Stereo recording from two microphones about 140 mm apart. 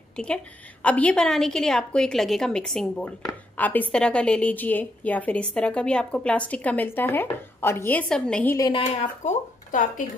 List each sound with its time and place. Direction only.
0.1 s a woman's voice: 5° left (ahead or behind)
8.5 s a woman's voice: 30° left (ahead or behind)
8.8 s speech: 55° left (ahead or behind)